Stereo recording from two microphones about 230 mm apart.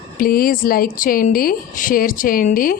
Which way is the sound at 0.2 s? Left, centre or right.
Left.